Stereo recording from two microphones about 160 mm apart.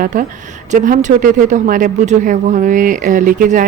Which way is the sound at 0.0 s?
60° right (ahead or behind).